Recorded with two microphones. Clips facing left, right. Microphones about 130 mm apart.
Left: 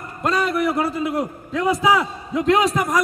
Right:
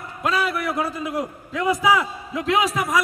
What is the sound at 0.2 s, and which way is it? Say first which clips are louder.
A man's voice: left 3 dB; centre (ahead or behind).